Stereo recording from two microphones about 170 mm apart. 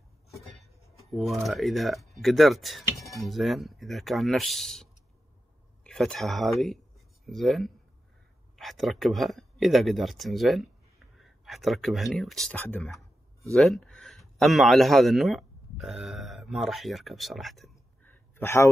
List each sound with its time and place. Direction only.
1.1 s speech: centre (ahead or behind)
5.9 s speech: 5° left (ahead or behind)
18.0 s a sound: 15° left (ahead or behind)